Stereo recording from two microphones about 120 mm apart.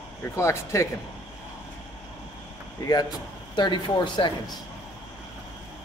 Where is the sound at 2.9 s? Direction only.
35° left (ahead or behind).